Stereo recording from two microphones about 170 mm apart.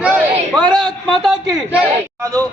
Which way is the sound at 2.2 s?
20° right (ahead or behind).